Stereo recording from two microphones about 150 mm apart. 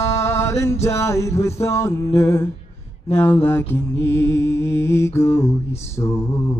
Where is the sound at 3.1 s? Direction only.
15° left (ahead or behind).